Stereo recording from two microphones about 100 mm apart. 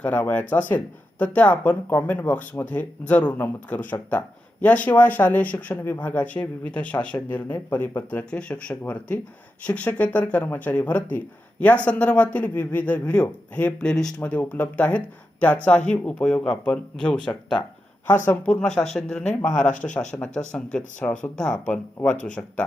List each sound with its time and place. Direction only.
0.0 s speech: 15° left (ahead or behind)
19.8 s speech: 25° left (ahead or behind)
20.2 s speech: 10° left (ahead or behind)